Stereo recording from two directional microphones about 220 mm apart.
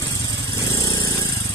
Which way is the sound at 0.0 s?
15° left (ahead or behind).